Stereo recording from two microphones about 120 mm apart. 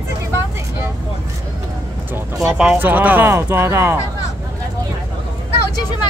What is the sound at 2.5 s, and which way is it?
Speech, 10° right (ahead or behind).